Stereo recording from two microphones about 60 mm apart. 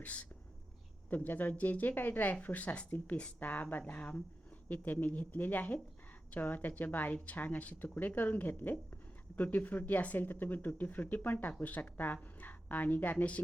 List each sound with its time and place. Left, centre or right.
0.0 s speech: left